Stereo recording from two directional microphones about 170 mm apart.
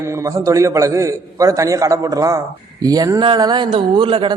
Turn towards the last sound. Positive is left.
turn(degrees=-30)  # may be behind; listen again after turning